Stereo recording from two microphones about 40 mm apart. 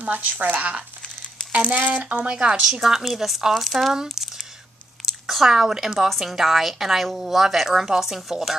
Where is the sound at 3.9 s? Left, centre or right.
Centre.